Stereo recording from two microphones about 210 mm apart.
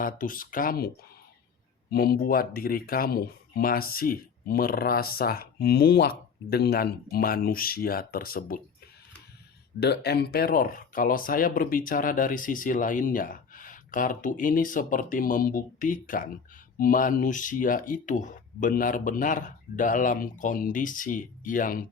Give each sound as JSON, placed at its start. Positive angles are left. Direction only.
{"t": 0.0, "sound": "speech", "side_deg": 40}
{"t": 1.9, "sound": "speech", "side_deg": 45}
{"t": 9.8, "sound": "speech", "side_deg": 50}